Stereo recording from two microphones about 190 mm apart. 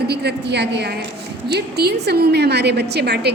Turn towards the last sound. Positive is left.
turn(degrees=-60)  # may be behind; listen again after turning